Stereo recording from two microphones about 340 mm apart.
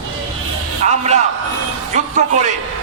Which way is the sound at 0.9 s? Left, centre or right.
Centre.